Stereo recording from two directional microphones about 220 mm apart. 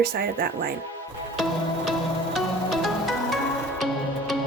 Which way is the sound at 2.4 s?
Centre (ahead or behind).